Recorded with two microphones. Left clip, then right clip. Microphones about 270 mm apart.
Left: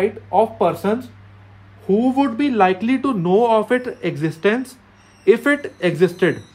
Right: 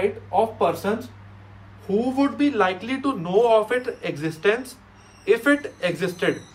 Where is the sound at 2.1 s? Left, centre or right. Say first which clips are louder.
Left 4 dB; left.